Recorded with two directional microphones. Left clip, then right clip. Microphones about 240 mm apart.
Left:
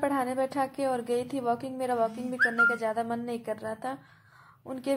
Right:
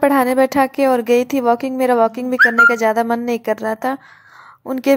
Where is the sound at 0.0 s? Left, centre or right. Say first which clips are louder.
Right 15 dB; right.